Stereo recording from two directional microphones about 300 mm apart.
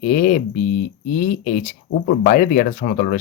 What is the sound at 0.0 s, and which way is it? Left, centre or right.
Speech, left.